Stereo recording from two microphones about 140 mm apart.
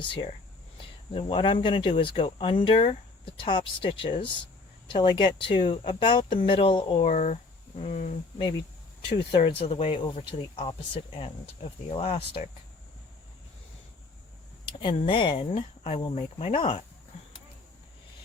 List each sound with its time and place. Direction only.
0.0 s speech: 35° left (ahead or behind)
7.0 s speech: 60° left (ahead or behind)
9.5 s speech: 45° left (ahead or behind)
14.6 s speech: 40° left (ahead or behind)